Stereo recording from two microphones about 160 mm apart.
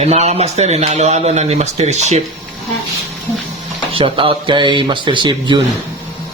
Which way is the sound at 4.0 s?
35° right (ahead or behind).